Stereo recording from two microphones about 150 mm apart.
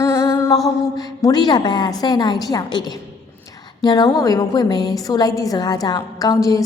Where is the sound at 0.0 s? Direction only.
20° left (ahead or behind).